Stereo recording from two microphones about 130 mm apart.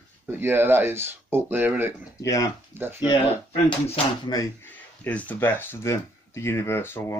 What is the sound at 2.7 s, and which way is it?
Speech, 15° right (ahead or behind).